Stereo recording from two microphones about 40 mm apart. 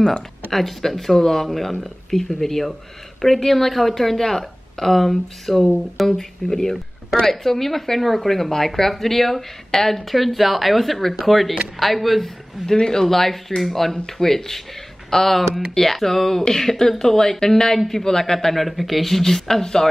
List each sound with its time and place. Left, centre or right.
0.5 s a woman's voice: centre
12.6 s a woman's voice: centre